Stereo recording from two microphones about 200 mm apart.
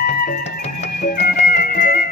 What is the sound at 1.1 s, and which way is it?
Music, 50° left (ahead or behind).